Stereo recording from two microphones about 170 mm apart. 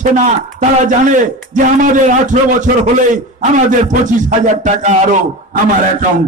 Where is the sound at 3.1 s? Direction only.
50° right (ahead or behind).